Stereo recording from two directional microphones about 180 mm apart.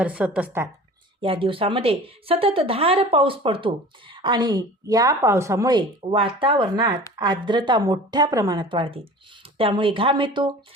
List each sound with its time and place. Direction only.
0.0 s a woman's voice: 5° right (ahead or behind)
1.2 s a woman's voice: 30° right (ahead or behind)